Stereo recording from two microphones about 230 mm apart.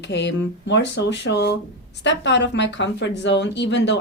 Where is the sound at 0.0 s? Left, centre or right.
Left.